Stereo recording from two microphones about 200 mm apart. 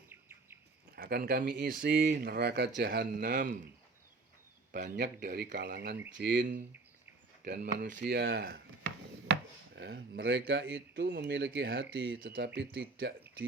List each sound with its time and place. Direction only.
0.1 s bird: 10° right (ahead or behind)
0.9 s speech: 50° right (ahead or behind)
4.7 s a man's voice: 45° right (ahead or behind)
7.4 s speech: 50° right (ahead or behind)
8.8 s speech: 65° right (ahead or behind)
13.0 s speech: 60° right (ahead or behind)